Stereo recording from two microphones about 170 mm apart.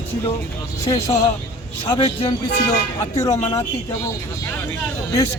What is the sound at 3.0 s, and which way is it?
Speech, 20° left (ahead or behind).